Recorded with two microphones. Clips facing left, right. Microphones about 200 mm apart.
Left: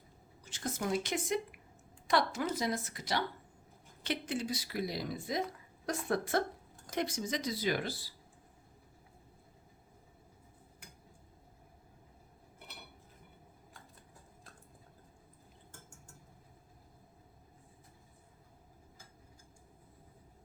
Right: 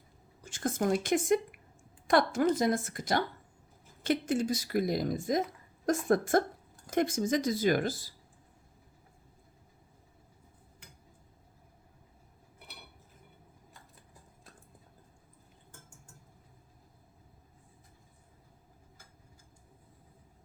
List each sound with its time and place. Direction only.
0.4 s a woman's voice: 50° right (ahead or behind)